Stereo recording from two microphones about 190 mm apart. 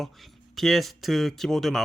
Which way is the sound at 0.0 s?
Centre (ahead or behind).